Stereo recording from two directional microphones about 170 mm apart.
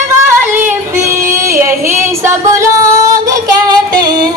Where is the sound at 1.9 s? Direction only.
15° right (ahead or behind).